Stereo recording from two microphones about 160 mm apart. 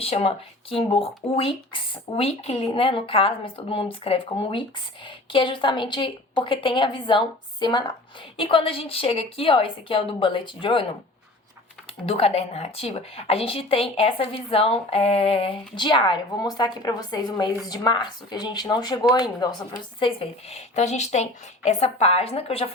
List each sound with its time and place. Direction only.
0.0 s a woman's voice: 40° left (ahead or behind)
12.0 s a woman's voice: 40° left (ahead or behind)